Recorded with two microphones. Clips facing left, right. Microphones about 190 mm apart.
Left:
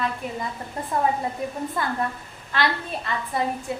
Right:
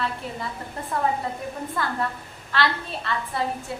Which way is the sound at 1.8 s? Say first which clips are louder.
Even; 20° left (ahead or behind).